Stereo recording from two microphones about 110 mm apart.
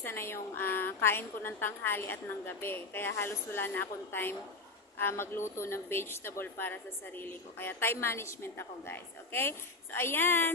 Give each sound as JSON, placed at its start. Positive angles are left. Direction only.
{"t": 0.0, "sound": "a woman's voice", "side_deg": 20}